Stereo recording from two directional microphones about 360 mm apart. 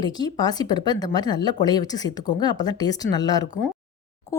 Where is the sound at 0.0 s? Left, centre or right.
Centre.